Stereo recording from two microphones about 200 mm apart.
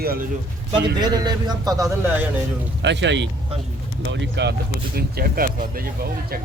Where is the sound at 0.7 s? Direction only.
20° right (ahead or behind).